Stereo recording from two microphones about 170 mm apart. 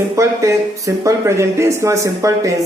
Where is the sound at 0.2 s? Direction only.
20° right (ahead or behind).